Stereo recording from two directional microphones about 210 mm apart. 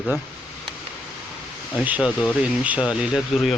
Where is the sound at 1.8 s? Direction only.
5° right (ahead or behind).